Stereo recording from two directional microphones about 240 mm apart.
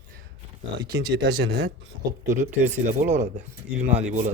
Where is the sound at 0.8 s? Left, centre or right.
Centre.